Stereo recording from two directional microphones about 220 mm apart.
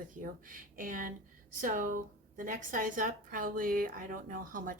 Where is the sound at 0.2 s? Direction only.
40° right (ahead or behind).